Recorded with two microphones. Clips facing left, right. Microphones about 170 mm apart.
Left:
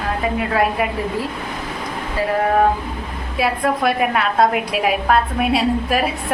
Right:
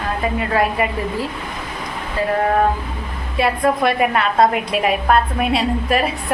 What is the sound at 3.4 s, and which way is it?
A woman's voice, centre (ahead or behind).